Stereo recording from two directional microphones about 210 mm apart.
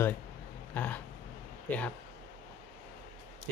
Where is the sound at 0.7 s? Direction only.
10° left (ahead or behind).